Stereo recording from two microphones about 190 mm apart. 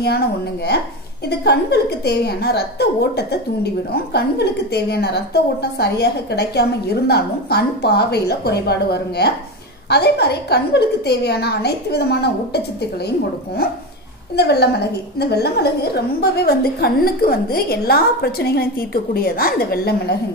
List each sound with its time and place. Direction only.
0.0 s a woman's voice: 60° left (ahead or behind)
14.3 s a woman's voice: 60° left (ahead or behind)